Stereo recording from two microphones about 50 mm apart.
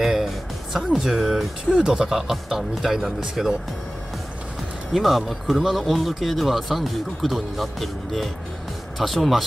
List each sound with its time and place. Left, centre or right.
0.0 s music: centre
0.9 s speech: centre
4.9 s speech: centre